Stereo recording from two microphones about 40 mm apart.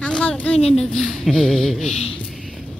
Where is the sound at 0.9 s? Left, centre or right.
Centre.